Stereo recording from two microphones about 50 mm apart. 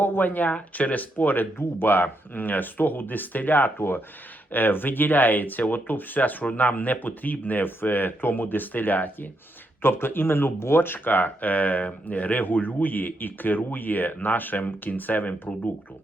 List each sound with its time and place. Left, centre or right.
0.0 s speech: left
9.8 s speech: left